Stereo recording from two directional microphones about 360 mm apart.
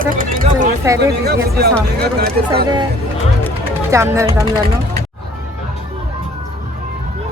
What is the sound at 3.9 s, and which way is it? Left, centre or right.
Speech, centre.